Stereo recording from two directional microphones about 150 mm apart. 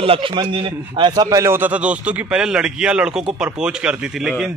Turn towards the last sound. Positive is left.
turn(degrees=-5)  # may be behind; listen again after turning